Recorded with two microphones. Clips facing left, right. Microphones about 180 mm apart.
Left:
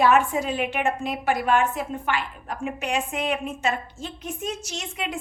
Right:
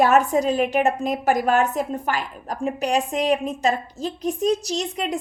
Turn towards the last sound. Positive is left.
turn(degrees=-35)  # may be behind; listen again after turning